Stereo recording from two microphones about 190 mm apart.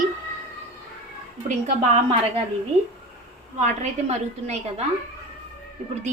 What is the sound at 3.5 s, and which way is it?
A woman's voice, 35° right (ahead or behind).